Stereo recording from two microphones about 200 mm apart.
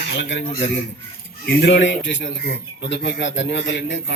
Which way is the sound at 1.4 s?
60° left (ahead or behind).